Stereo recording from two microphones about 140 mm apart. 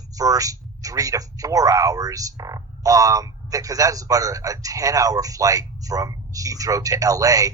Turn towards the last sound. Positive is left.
turn(degrees=-25)  # may be behind; listen again after turning